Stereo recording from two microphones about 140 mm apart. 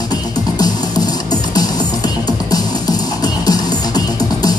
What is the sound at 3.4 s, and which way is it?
Music, 30° left (ahead or behind).